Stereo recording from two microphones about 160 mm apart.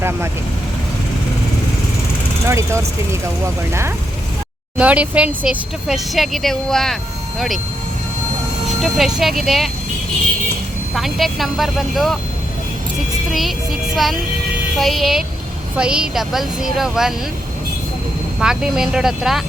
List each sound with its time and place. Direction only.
2.5 s speech: 15° right (ahead or behind); by 7.6 s centre (ahead or behind)
8.8 s speech: centre (ahead or behind)
10.9 s speech: centre (ahead or behind)
13.9 s speech: centre (ahead or behind)
18.3 s speech: 5° right (ahead or behind)